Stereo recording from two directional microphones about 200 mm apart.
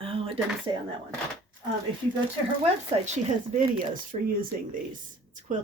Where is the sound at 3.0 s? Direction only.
30° right (ahead or behind).